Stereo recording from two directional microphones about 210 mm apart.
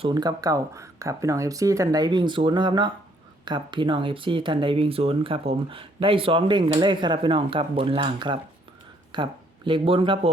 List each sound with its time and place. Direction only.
0.0 s speech: 20° right (ahead or behind)